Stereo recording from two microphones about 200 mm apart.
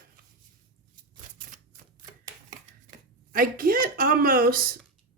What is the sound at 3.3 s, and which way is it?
Speech, 45° right (ahead or behind).